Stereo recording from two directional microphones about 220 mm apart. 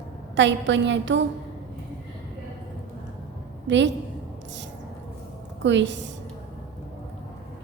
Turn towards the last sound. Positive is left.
turn(degrees=-55)  # may be behind; listen again after turning